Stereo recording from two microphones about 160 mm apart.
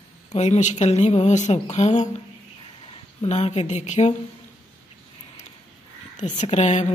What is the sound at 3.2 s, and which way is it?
Speech, 45° left (ahead or behind).